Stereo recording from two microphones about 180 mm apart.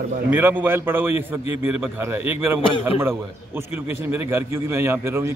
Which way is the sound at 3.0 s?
15° right (ahead or behind).